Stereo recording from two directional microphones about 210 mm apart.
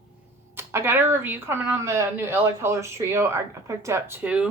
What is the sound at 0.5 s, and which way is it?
Speech, 10° right (ahead or behind).